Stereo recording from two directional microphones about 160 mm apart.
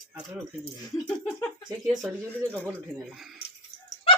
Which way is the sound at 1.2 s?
15° left (ahead or behind).